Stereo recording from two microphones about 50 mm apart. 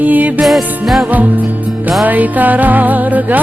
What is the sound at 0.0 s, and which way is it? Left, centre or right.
Music, right.